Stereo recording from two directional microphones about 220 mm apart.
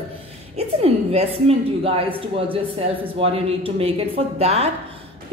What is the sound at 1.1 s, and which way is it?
Speech, 25° right (ahead or behind).